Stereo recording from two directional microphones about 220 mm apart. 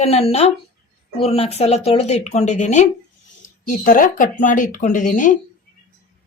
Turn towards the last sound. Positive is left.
turn(degrees=35)  # may be behind; listen again after turning